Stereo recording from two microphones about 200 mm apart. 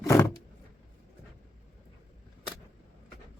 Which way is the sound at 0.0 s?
15° left (ahead or behind).